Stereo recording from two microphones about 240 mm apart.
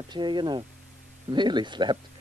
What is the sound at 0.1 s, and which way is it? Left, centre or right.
A man's voice, centre.